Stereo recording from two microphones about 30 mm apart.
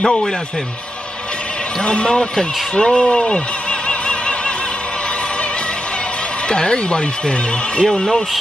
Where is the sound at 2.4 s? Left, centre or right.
Left.